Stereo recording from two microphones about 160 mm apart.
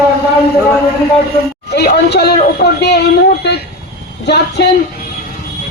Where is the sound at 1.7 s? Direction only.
90° left.